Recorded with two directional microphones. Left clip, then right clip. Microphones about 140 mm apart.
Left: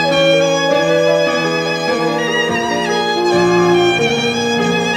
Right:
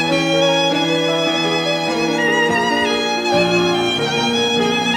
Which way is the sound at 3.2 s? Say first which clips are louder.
Left 3 dB; 35° right (ahead or behind).